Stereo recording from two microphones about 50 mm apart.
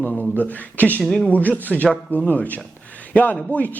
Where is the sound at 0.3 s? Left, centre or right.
Left.